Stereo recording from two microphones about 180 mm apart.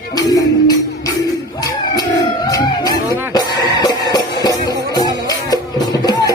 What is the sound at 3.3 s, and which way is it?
Music, 20° left (ahead or behind).